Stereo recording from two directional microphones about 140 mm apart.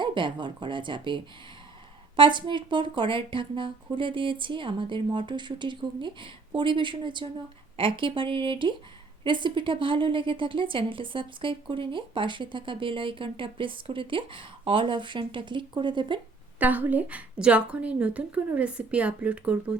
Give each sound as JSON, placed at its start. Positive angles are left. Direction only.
{"t": 0.0, "sound": "a woman's voice", "side_deg": -35}
{"t": 16.6, "sound": "a woman's voice", "side_deg": -10}